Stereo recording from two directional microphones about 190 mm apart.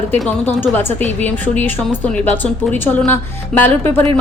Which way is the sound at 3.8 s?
30° right (ahead or behind).